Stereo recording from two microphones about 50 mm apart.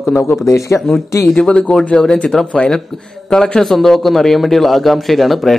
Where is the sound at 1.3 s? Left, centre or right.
Centre.